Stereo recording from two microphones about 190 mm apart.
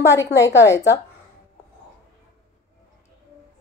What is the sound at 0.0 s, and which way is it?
Speech, 15° left (ahead or behind).